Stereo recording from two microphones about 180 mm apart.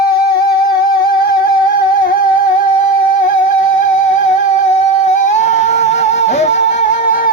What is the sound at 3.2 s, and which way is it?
Music, 45° left (ahead or behind).